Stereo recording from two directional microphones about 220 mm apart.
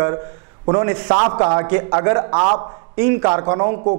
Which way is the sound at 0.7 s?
20° right (ahead or behind).